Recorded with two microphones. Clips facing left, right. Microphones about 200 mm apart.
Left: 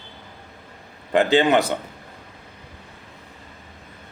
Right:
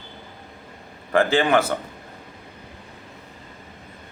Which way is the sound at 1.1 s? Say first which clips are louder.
Left 2 dB; 20° left (ahead or behind).